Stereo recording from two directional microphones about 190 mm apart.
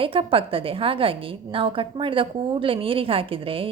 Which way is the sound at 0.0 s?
30° right (ahead or behind).